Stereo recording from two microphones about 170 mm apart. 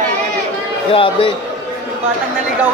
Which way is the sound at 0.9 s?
30° left (ahead or behind).